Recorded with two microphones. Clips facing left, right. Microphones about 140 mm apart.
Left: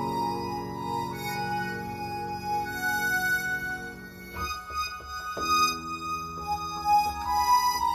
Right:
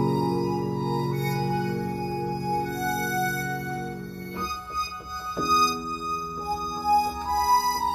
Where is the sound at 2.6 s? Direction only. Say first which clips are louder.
Right 4 dB; 35° right (ahead or behind).